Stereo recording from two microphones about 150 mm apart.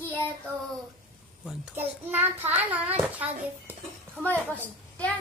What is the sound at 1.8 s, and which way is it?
A child's voice, 15° right (ahead or behind).